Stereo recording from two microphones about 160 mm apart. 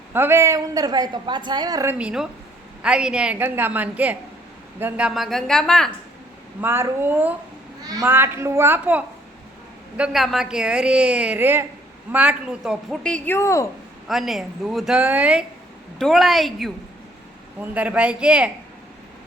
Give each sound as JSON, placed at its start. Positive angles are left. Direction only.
{"t": 0.1, "sound": "a woman's voice", "side_deg": -15}
{"t": 2.0, "sound": "a woman's voice", "side_deg": -5}
{"t": 6.6, "sound": "a woman's voice", "side_deg": -15}
{"t": 14.1, "sound": "a woman's voice", "side_deg": 0}